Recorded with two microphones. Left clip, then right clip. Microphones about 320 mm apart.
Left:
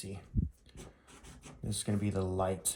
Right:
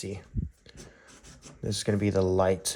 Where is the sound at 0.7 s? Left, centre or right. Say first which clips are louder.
Right 4 dB; centre.